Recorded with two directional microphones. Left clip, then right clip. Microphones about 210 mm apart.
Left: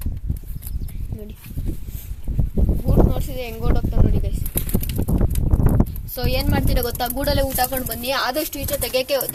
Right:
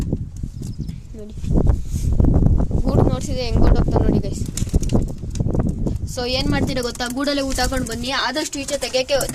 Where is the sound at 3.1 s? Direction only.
20° right (ahead or behind).